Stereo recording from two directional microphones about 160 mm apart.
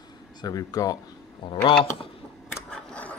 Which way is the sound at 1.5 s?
30° left (ahead or behind).